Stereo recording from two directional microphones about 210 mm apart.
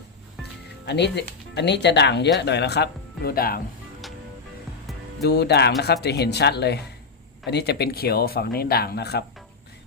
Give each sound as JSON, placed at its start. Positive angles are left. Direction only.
{"t": 0.9, "sound": "speech", "side_deg": 55}
{"t": 5.2, "sound": "speech", "side_deg": 50}